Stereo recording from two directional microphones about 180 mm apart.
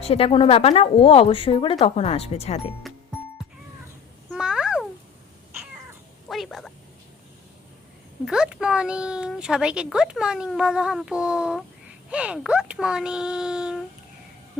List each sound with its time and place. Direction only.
0.0 s speech: 30° left (ahead or behind)
4.3 s cat: 5° right (ahead or behind)
6.2 s cat: centre (ahead or behind)
8.2 s speech: 5° right (ahead or behind)